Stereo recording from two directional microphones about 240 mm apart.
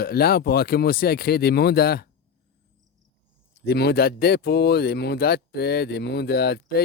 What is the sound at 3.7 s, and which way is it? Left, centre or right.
Speech, left.